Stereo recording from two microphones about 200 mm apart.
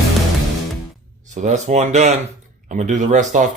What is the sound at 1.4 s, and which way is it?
Speech, 35° right (ahead or behind).